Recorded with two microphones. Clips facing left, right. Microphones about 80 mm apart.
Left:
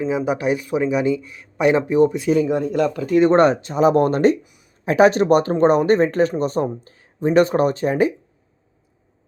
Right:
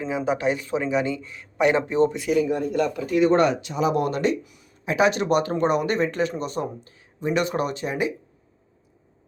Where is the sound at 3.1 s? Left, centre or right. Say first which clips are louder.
Left 5 dB; left.